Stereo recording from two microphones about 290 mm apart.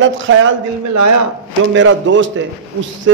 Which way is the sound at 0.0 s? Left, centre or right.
Right.